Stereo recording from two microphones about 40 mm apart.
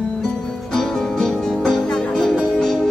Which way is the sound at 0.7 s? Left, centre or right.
Centre.